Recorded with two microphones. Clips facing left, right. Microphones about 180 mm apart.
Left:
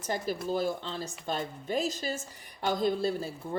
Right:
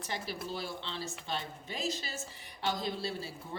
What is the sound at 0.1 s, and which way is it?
Speech, 45° left (ahead or behind).